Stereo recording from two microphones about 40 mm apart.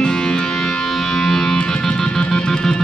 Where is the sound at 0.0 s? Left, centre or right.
Centre.